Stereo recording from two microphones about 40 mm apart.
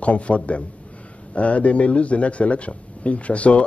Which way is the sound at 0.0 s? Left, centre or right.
Left.